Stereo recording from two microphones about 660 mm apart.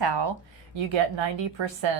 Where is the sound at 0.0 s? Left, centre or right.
Right.